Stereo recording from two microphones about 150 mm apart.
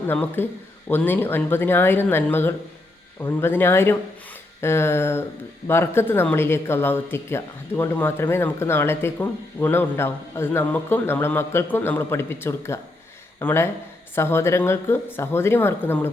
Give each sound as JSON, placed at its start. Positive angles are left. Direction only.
{"t": 0.1, "sound": "speech", "side_deg": 15}